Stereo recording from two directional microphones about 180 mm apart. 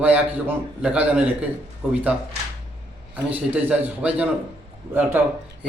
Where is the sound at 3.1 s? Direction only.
10° right (ahead or behind).